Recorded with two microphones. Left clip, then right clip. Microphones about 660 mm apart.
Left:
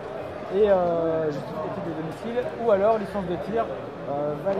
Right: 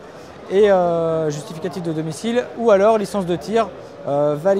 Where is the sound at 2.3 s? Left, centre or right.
Right.